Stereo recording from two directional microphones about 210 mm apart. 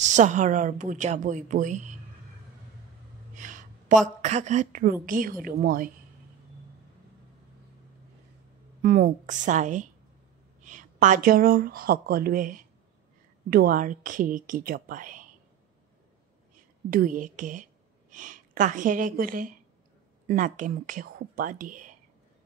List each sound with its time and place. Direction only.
0.0 s a woman's voice: 35° right (ahead or behind)
3.3 s a woman's voice: 40° right (ahead or behind)
8.8 s a woman's voice: 40° right (ahead or behind)
16.9 s a woman's voice: 40° right (ahead or behind)